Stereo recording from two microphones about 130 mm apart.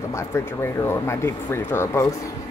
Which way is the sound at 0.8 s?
20° left (ahead or behind).